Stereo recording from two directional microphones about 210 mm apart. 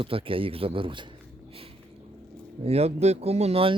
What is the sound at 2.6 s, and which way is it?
A man's voice, 30° right (ahead or behind).